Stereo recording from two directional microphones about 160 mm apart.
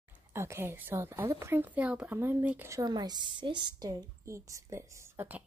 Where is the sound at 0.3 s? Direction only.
15° right (ahead or behind).